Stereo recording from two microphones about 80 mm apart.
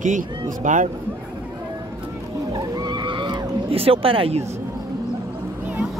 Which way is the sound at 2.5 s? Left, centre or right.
Right.